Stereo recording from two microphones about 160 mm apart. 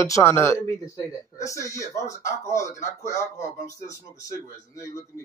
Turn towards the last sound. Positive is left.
turn(degrees=20)  # may be behind; listen again after turning